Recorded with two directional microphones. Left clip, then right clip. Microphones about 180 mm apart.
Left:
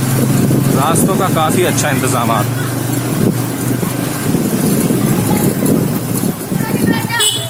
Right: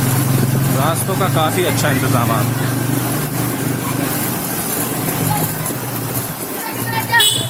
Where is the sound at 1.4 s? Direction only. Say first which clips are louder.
Left 3 dB; 30° left (ahead or behind).